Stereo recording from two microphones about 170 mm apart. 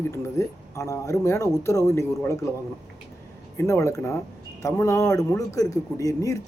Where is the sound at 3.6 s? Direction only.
15° left (ahead or behind).